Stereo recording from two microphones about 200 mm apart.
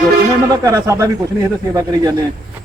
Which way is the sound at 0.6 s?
15° right (ahead or behind).